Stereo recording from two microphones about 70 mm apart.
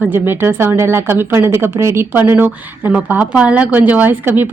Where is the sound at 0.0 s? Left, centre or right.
Right.